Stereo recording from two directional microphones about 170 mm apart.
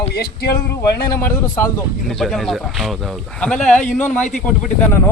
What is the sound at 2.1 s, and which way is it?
Speech, centre (ahead or behind).